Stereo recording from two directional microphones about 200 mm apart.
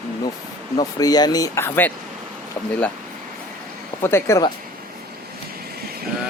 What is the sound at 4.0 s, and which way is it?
Speech, 10° left (ahead or behind).